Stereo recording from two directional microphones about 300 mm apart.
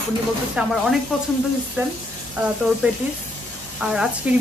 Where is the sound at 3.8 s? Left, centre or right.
Centre.